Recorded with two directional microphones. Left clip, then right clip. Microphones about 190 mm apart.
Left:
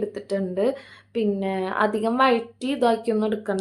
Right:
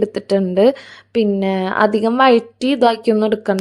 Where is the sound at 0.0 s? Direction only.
45° right (ahead or behind).